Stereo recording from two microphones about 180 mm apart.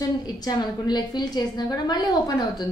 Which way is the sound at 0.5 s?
25° left (ahead or behind).